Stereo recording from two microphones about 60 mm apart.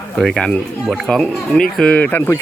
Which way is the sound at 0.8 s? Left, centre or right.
Centre.